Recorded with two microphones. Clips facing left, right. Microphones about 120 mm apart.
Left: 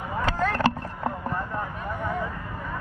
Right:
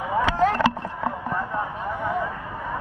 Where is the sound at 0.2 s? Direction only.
70° right (ahead or behind).